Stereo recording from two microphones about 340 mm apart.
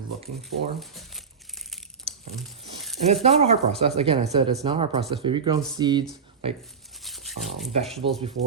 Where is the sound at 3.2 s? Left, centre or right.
Centre.